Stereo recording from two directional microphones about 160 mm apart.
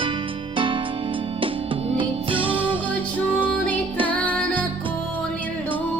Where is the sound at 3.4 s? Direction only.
10° left (ahead or behind).